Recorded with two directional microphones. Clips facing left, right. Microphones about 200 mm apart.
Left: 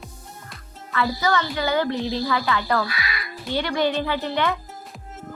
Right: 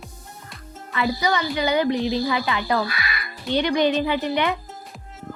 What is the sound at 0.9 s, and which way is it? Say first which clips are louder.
A woman's voice: even; 15° right (ahead or behind).